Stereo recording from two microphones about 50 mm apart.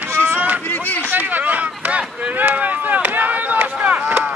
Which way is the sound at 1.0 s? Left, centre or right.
Right.